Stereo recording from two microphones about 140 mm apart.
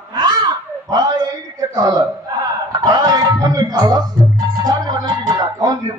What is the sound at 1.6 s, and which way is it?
Speech, 25° right (ahead or behind).